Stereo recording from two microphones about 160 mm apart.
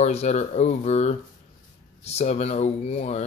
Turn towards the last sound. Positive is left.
turn(degrees=40)  # may be behind; listen again after turning